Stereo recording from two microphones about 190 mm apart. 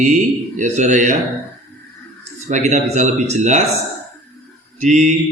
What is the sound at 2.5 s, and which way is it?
A man's voice, 35° right (ahead or behind).